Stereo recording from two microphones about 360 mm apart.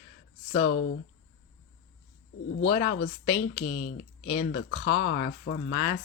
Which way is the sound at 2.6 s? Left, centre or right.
Left.